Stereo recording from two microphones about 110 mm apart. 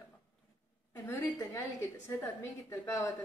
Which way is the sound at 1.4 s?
25° left (ahead or behind).